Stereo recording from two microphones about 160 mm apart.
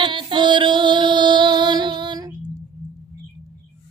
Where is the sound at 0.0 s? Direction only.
30° right (ahead or behind).